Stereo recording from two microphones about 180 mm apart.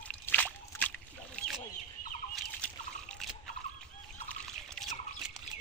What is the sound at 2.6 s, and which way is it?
Trickle, 5° left (ahead or behind).